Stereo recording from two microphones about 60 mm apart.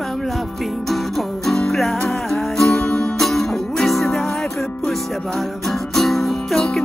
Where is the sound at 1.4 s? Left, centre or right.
Centre.